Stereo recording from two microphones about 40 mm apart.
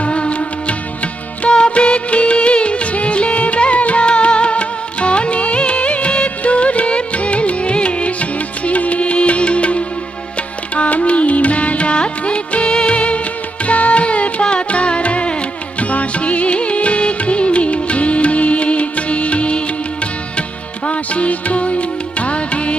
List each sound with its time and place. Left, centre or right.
0.0 s music: left
1.5 s music of bollywood: left
10.8 s music: left
20.8 s music: left